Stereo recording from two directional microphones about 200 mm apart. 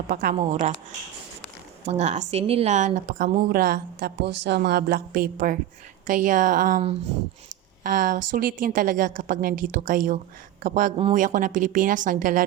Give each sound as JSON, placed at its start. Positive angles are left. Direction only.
{"t": 0.1, "sound": "a woman's voice", "side_deg": -45}
{"t": 1.9, "sound": "speech", "side_deg": -35}
{"t": 3.5, "sound": "a woman's voice", "side_deg": -50}